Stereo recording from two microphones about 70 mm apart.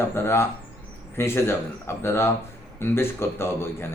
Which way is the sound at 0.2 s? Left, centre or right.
Left.